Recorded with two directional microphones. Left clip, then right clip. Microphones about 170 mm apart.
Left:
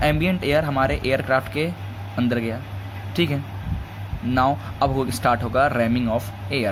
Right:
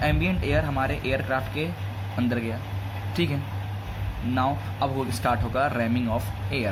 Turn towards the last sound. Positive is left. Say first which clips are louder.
# left 5 dB
turn(degrees=30)  # may be behind; listen again after turning